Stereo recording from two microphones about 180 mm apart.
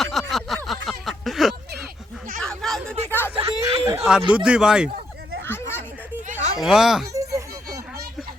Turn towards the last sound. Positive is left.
turn(degrees=-20)  # may be behind; listen again after turning